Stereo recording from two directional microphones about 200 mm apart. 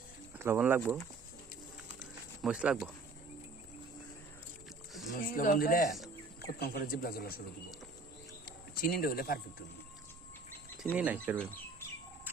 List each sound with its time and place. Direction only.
0.3 s speech: 10° right (ahead or behind)
2.4 s speech: 5° right (ahead or behind)
5.1 s speech: 45° left (ahead or behind)
8.4 s speech: 50° left (ahead or behind)
10.9 s speech: 10° right (ahead or behind)